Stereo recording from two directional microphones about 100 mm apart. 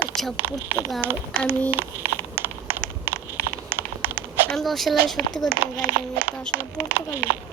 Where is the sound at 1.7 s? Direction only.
20° right (ahead or behind).